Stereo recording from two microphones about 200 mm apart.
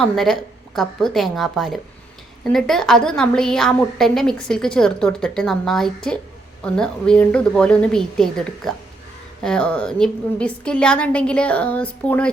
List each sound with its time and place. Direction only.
0.0 s a woman's voice: centre (ahead or behind)